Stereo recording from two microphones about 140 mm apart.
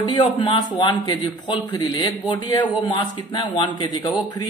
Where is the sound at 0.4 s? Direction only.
35° left (ahead or behind).